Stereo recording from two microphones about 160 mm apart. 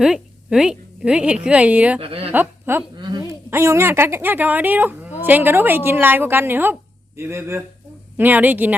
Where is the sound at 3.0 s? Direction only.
25° right (ahead or behind).